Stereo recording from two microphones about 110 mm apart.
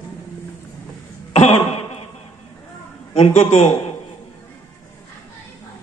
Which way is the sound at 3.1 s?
90° left.